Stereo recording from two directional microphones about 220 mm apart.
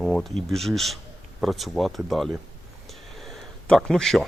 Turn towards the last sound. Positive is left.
turn(degrees=0)  # may be behind; listen again after turning